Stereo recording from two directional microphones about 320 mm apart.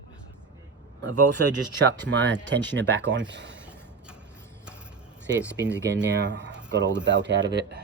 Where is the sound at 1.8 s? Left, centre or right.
Right.